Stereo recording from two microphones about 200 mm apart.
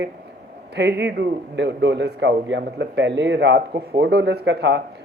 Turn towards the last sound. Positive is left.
turn(degrees=-60)  # may be behind; listen again after turning